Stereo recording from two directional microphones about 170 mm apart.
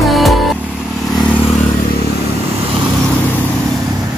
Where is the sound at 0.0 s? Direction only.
Centre (ahead or behind).